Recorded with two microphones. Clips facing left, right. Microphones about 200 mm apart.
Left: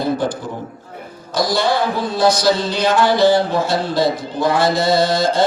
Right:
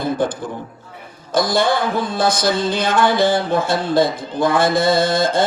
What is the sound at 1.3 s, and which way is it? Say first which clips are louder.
A man's voice: right 1 dB; 50° right (ahead or behind).